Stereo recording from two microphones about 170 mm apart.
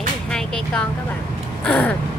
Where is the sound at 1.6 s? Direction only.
10° left (ahead or behind).